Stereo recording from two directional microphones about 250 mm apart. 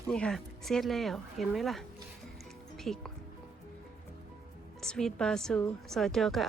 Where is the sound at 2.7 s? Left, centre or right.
Centre.